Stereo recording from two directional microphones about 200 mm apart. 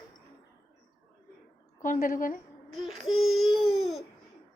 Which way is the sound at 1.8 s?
40° left (ahead or behind).